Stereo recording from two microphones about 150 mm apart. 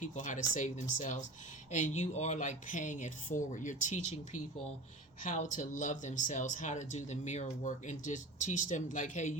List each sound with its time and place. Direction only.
0.0 s speech: 55° left (ahead or behind)